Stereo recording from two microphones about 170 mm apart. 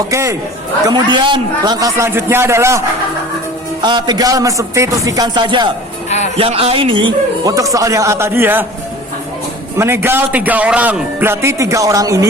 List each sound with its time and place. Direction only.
0.1 s a man's voice: 15° right (ahead or behind)
3.8 s a man's voice: 25° right (ahead or behind)
6.1 s speech: 40° left (ahead or behind)
6.3 s a man's voice: 35° right (ahead or behind); by 8.6 s 10° right (ahead or behind)
9.7 s a man's voice: 15° right (ahead or behind)